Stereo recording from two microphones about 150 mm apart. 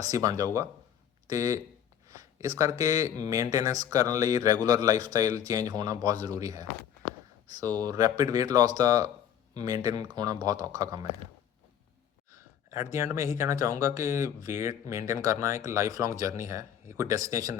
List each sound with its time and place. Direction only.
0.0 s speech: 25° right (ahead or behind)
12.3 s speech: 20° right (ahead or behind)